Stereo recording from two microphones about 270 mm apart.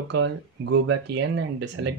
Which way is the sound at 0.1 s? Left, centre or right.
Right.